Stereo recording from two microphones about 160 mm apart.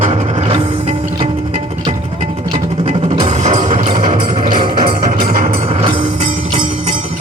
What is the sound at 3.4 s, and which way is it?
Music, 45° right (ahead or behind).